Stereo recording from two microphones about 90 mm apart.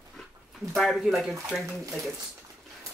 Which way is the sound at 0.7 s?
Centre (ahead or behind).